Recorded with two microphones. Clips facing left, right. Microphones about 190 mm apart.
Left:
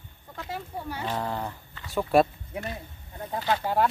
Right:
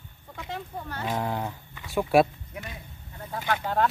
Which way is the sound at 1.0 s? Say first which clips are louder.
Right 2 dB; 10° right (ahead or behind).